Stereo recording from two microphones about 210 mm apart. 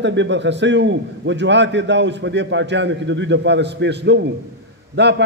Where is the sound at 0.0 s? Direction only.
60° right (ahead or behind).